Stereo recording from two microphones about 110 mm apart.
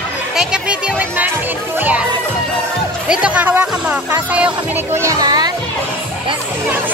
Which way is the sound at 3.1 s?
10° right (ahead or behind).